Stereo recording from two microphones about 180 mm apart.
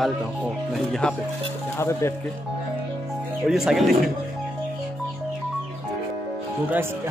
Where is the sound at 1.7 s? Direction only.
15° left (ahead or behind).